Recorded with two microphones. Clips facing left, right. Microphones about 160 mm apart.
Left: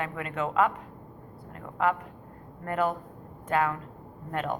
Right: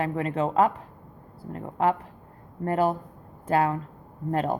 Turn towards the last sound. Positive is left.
turn(degrees=-35)  # may be behind; listen again after turning